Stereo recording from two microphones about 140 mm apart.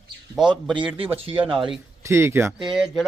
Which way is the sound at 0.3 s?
5° right (ahead or behind).